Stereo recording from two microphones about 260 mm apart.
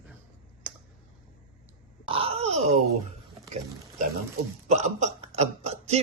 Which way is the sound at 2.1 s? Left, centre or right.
Right.